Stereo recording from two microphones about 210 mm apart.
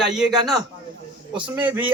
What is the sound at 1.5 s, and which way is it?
Speech, 10° right (ahead or behind).